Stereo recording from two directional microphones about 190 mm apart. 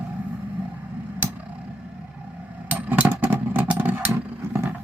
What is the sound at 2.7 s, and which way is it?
Vehicle, 10° right (ahead or behind).